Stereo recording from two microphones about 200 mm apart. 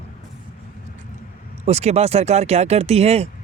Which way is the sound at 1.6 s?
30° right (ahead or behind).